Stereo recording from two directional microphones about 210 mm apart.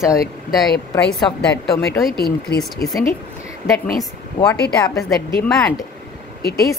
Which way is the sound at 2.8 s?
10° left (ahead or behind).